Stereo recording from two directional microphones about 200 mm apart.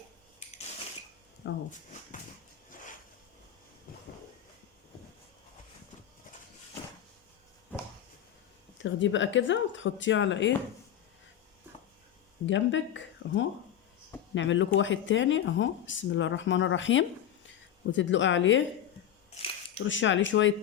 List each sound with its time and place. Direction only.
1.4 s speech: 60° left (ahead or behind)
8.8 s speech: 70° left (ahead or behind)
12.5 s speech: 70° left (ahead or behind)
19.8 s speech: 70° left (ahead or behind)